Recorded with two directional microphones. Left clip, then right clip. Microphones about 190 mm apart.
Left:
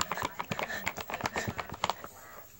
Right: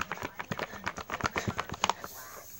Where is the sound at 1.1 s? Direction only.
25° right (ahead or behind).